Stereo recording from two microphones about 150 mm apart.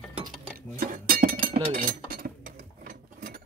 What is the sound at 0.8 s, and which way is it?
Chink, 70° right (ahead or behind).